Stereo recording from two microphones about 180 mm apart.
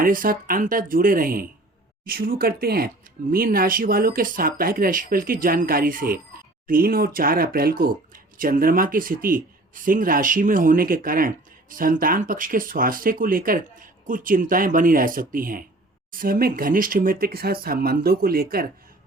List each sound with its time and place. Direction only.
0.0 s speech: 50° right (ahead or behind)